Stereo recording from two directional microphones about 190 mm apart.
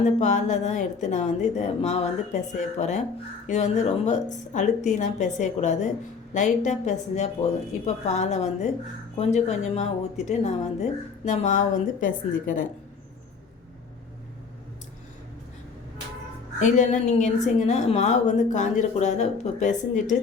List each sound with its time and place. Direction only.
0.0 s a woman's voice: 40° left (ahead or behind)
16.6 s a woman's voice: 40° left (ahead or behind)